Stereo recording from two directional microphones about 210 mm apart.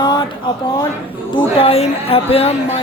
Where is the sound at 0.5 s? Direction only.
20° left (ahead or behind).